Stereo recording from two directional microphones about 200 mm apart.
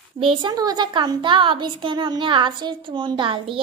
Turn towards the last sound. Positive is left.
turn(degrees=-25)  # may be behind; listen again after turning